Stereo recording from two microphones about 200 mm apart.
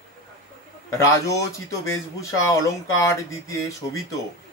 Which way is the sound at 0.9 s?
15° left (ahead or behind).